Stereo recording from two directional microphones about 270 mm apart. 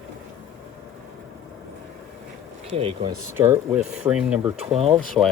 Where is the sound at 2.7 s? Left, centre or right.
Centre.